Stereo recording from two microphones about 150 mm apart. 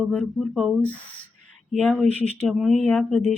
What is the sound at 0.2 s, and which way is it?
Speech, centre (ahead or behind).